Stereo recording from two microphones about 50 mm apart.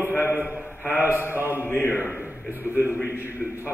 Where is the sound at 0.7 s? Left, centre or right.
Left.